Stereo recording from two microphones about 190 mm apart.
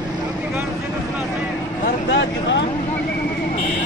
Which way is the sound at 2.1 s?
70° left (ahead or behind).